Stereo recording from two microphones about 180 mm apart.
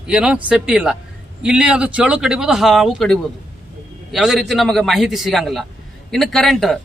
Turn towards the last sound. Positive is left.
turn(degrees=0)  # may be behind; listen again after turning